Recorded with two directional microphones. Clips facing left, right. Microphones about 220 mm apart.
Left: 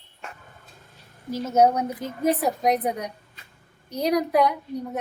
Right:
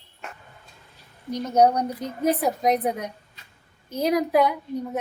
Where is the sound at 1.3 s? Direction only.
5° left (ahead or behind).